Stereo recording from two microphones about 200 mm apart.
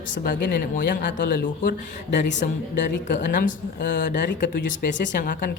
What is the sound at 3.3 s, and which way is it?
Speech, 40° left (ahead or behind).